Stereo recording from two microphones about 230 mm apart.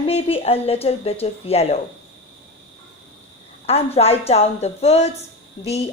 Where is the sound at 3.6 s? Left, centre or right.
Left.